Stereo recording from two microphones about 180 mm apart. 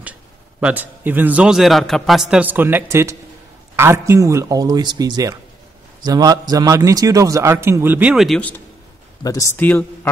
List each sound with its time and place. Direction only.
0.6 s a man's voice: 10° right (ahead or behind)
9.2 s speech: 20° left (ahead or behind)